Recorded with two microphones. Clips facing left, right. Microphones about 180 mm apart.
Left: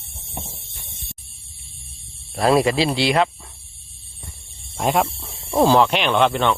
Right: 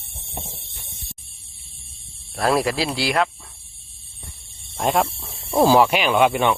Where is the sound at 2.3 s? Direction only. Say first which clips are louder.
Left 3 dB; centre (ahead or behind).